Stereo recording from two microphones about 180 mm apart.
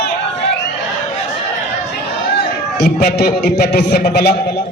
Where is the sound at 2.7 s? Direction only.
60° left (ahead or behind).